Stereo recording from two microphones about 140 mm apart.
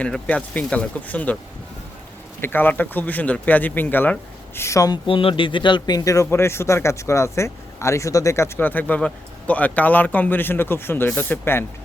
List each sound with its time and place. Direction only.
0.0 s speech: 10° left (ahead or behind)
2.4 s speech: 15° left (ahead or behind)
5.0 s a man's voice: 40° left (ahead or behind); by 11.6 s 15° left (ahead or behind)